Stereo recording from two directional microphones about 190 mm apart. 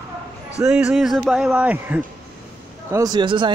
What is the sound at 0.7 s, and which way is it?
Speech, 5° right (ahead or behind).